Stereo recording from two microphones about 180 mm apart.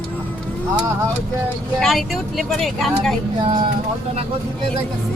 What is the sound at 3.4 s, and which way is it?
Speech, 30° right (ahead or behind).